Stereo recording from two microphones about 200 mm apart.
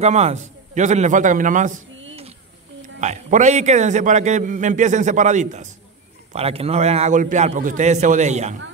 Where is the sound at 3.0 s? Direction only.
35° right (ahead or behind).